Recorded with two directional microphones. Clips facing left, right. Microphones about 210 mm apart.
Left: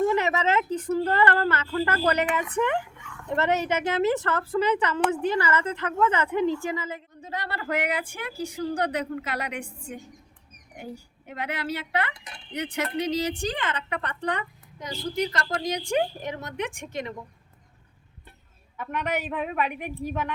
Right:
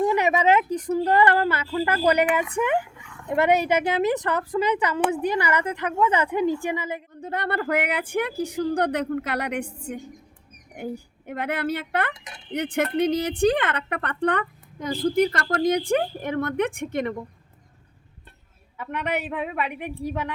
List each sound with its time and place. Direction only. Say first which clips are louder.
0.0 s speech: right 3 dB; 15° right (ahead or behind)
7.2 s a woman's voice: right 8 dB; 55° right (ahead or behind)